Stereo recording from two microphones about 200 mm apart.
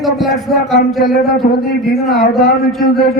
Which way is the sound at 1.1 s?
50° left (ahead or behind).